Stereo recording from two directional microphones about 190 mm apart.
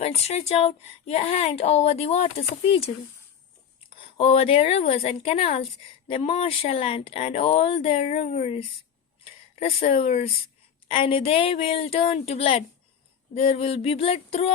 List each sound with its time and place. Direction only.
0.0 s speech: 35° left (ahead or behind)
4.2 s speech: 30° left (ahead or behind)
9.2 s a sound: 30° left (ahead or behind)
9.9 s speech: 35° left (ahead or behind)